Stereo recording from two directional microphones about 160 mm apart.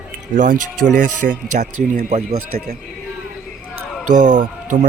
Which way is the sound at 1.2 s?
65° right (ahead or behind).